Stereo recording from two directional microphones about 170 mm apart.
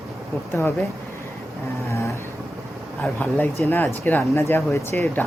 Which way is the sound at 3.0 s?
10° left (ahead or behind).